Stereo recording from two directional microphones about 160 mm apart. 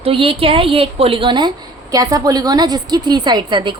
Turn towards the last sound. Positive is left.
turn(degrees=-30)  # may be behind; listen again after turning